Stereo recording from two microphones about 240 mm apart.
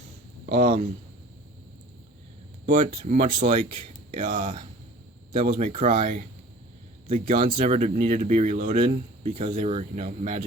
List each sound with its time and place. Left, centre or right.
0.4 s speech: right
2.6 s speech: right
3.7 s a sound: right
4.2 s speech: right
5.3 s speech: right